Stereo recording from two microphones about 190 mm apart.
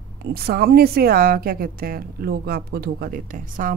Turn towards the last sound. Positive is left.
turn(degrees=-45)  # may be behind; listen again after turning